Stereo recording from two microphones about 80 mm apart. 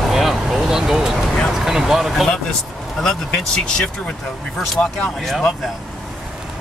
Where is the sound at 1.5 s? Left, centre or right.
Centre.